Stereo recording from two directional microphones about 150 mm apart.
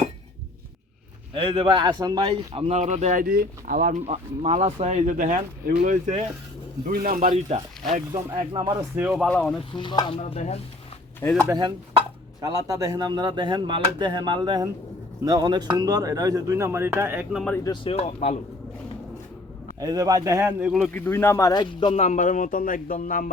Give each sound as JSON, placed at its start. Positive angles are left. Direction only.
{"t": 1.3, "sound": "speech", "side_deg": -35}
{"t": 4.0, "sound": "speech", "side_deg": -50}
{"t": 7.3, "sound": "speech", "side_deg": -45}
{"t": 9.1, "sound": "speech", "side_deg": 5}
{"t": 9.7, "sound": "speech", "side_deg": 30}
{"t": 11.2, "sound": "speech", "side_deg": 15}
{"t": 11.4, "sound": "speech", "side_deg": -30}
{"t": 17.5, "sound": "speech", "side_deg": 20}
{"t": 17.8, "sound": "speech", "side_deg": 45}
{"t": 19.8, "sound": "speech", "side_deg": -25}
{"t": 20.7, "sound": "speech", "side_deg": -5}
{"t": 20.9, "sound": "speech", "side_deg": 15}
{"t": 21.9, "sound": "speech", "side_deg": 50}